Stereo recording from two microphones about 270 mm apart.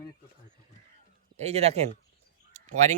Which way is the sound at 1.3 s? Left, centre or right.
Right.